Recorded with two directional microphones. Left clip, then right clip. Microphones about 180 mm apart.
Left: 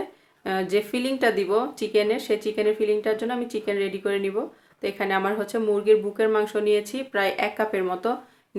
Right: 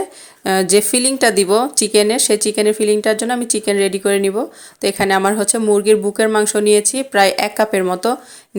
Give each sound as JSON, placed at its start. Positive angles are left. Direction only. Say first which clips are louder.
{"t": 0.4, "sound": "speech", "louder": "right 10 dB", "side_deg": -50}